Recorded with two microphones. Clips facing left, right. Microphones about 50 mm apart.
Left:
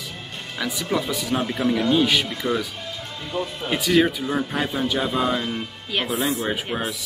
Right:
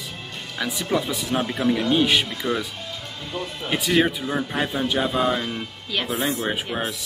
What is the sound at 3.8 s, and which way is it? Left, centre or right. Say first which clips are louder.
Speech: left 2 dB; centre.